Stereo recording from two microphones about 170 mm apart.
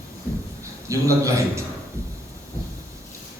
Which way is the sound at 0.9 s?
20° right (ahead or behind).